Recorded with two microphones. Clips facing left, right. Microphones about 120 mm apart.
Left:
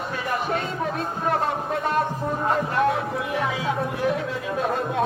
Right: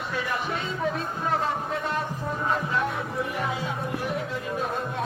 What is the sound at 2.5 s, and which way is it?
Music, 75° left (ahead or behind).